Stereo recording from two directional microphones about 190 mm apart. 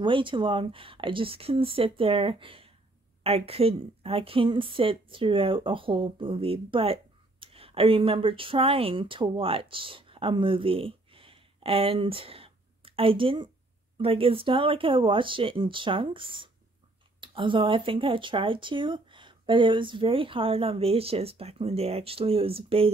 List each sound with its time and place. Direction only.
0.0 s a woman's voice: 25° right (ahead or behind)